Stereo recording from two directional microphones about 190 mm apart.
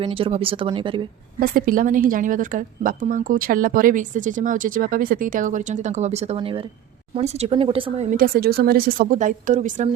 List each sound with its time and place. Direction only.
0.0 s speech: 30° right (ahead or behind)
1.4 s a woman's voice: 45° right (ahead or behind)
8.2 s a woman's voice: 55° right (ahead or behind)